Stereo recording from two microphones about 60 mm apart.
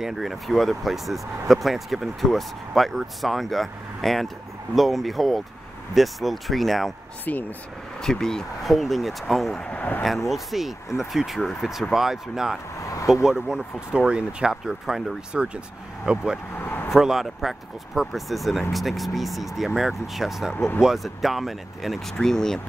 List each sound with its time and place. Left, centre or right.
0.0 s speech: centre
7.3 s speech: left
8.0 s speech: centre
9.8 s speech: left
10.0 s speech: centre
12.8 s a sound: left
13.1 s speech: centre
15.3 s speech: centre
16.5 s vehicle: left
16.9 s speech: centre
22.1 s speech: centre